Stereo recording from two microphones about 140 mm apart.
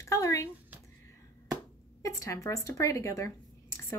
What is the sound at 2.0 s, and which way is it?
A woman's voice, 25° left (ahead or behind).